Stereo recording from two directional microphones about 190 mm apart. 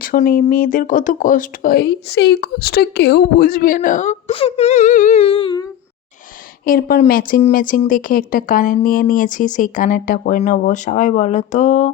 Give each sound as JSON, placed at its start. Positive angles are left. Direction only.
{"t": 0.0, "sound": "speech", "side_deg": 50}
{"t": 6.7, "sound": "speech", "side_deg": 50}